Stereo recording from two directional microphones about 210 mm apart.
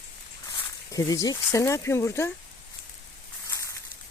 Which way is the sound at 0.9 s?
15° left (ahead or behind).